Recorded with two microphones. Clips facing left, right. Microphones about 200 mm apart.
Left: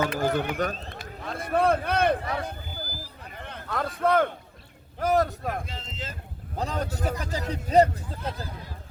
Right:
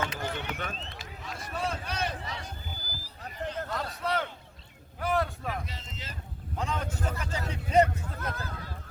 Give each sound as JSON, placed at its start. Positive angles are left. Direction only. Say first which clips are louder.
{"t": 0.1, "sound": "speech", "louder": "left 9 dB", "side_deg": 55}
{"t": 0.6, "sound": "a sound", "louder": "left 9 dB", "side_deg": 45}
{"t": 4.9, "sound": "speech", "louder": "left 6 dB", "side_deg": 40}
{"t": 6.6, "sound": "a man's voice", "louder": "left 4 dB", "side_deg": 35}